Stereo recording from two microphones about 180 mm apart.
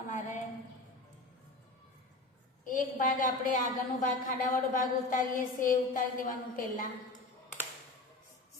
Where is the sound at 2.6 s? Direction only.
50° left (ahead or behind).